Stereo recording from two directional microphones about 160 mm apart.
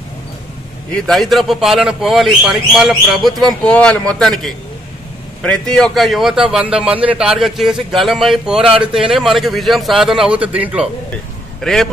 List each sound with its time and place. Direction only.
0.9 s speech: 5° left (ahead or behind)
8.6 s speech: 35° right (ahead or behind)
8.9 s speech: centre (ahead or behind)
11.6 s speech: 5° left (ahead or behind)